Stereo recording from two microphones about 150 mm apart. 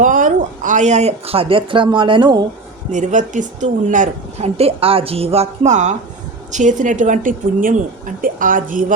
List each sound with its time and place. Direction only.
0.0 s speech: 60° right (ahead or behind); by 2.4 s 30° right (ahead or behind)
2.9 s speech: 55° right (ahead or behind)
4.4 s a woman's voice: 40° right (ahead or behind); by 8.8 s 65° right (ahead or behind)